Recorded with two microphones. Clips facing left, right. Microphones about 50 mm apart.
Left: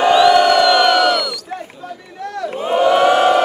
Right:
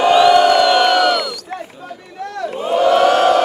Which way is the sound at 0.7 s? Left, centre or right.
Right.